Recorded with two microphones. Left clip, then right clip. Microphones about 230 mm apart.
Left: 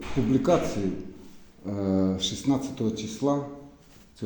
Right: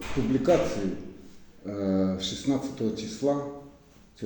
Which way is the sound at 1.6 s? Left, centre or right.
Left.